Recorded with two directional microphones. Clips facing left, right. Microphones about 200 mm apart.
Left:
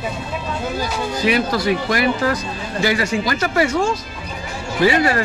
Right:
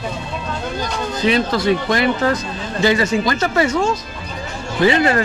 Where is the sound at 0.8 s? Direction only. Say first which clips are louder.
Even; 5° left (ahead or behind).